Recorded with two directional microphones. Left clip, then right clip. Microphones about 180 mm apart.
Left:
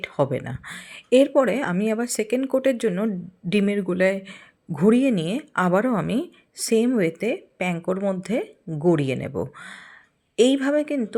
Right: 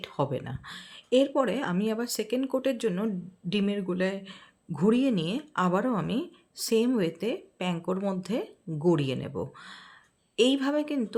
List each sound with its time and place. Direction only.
0.0 s speech: 20° left (ahead or behind)